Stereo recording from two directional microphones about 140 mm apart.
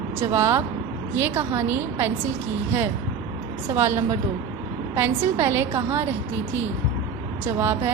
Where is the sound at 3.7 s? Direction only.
20° right (ahead or behind).